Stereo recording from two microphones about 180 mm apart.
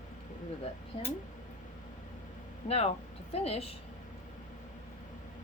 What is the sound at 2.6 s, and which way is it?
Speech, 35° left (ahead or behind).